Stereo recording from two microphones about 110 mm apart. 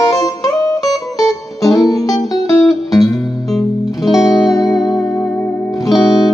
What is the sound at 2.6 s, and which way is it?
Music, centre (ahead or behind).